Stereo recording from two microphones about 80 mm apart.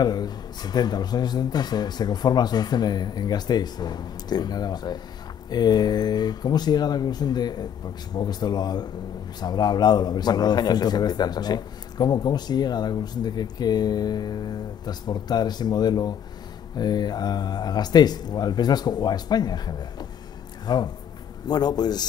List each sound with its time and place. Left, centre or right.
0.0 s a man's voice: left